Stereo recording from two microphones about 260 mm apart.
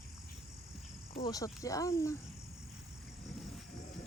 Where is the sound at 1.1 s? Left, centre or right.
Centre.